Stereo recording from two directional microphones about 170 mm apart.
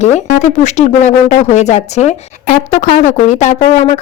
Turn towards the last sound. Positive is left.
turn(degrees=45)  # may be behind; listen again after turning